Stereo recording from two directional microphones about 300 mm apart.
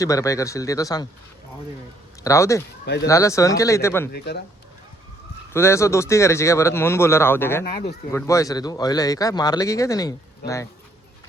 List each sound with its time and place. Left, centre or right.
0.0 s speech: centre
2.2 s speech: centre
2.8 s speech: left
3.1 s speech: centre
4.1 s speech: left
5.5 s speech: centre